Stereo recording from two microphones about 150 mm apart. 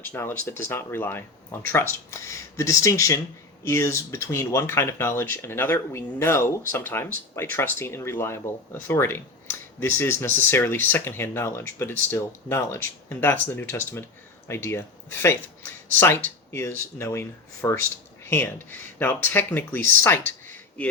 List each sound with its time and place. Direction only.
0.0 s speech: 15° left (ahead or behind)